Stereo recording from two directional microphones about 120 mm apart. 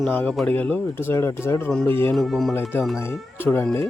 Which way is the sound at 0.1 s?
15° left (ahead or behind).